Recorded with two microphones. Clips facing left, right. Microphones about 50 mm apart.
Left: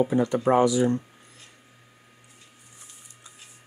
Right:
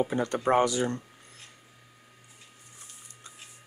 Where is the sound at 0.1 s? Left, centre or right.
Right.